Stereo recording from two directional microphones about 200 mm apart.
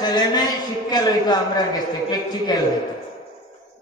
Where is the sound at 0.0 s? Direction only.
20° left (ahead or behind).